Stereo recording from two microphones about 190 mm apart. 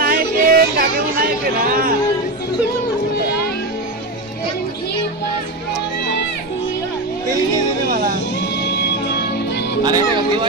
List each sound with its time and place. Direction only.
0.0 s a sound: 50° right (ahead or behind)
8.4 s music: 60° left (ahead or behind)
9.8 s speech: 20° right (ahead or behind)